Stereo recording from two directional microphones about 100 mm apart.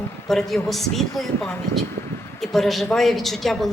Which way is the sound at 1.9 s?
25° left (ahead or behind).